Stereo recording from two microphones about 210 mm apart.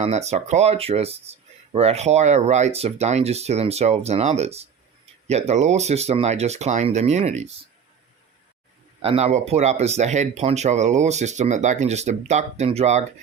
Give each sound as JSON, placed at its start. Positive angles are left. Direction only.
{"t": 0.0, "sound": "speech", "side_deg": -30}
{"t": 9.0, "sound": "speech", "side_deg": -30}